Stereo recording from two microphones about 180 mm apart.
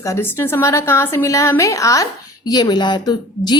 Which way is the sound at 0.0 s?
15° left (ahead or behind).